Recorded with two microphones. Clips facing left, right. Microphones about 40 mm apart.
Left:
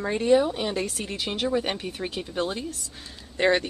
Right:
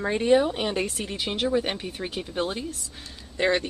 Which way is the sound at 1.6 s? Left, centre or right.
Centre.